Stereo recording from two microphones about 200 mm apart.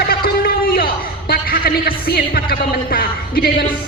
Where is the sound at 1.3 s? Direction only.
50° left (ahead or behind).